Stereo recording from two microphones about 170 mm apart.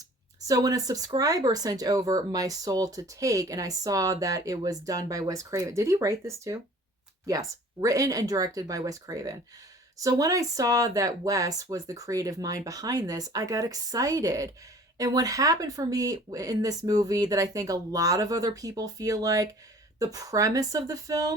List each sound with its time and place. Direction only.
0.4 s speech: 20° right (ahead or behind)